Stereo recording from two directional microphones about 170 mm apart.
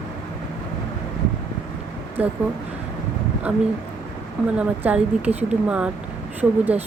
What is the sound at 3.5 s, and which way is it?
Speech, 10° right (ahead or behind).